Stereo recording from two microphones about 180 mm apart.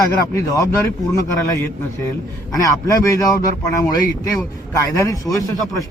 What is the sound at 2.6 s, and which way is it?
Speech, 15° left (ahead or behind).